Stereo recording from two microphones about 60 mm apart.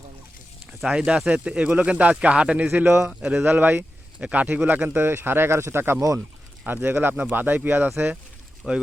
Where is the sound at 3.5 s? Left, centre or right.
Right.